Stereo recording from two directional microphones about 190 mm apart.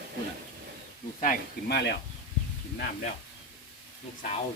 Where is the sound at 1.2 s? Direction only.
45° left (ahead or behind).